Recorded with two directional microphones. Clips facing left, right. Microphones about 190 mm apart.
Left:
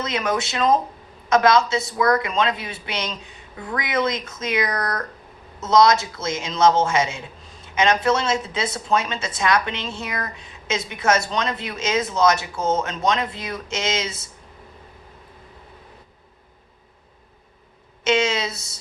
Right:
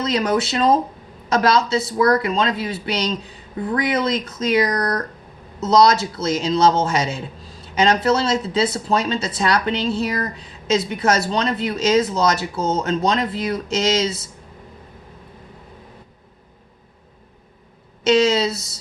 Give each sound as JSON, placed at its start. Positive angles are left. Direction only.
{"t": 0.0, "sound": "a man's voice", "side_deg": -30}
{"t": 18.0, "sound": "a man's voice", "side_deg": -35}